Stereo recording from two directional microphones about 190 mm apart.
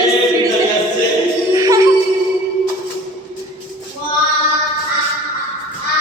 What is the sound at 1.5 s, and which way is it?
Music, 15° right (ahead or behind).